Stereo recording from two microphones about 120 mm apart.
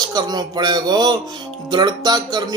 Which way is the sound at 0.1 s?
35° right (ahead or behind).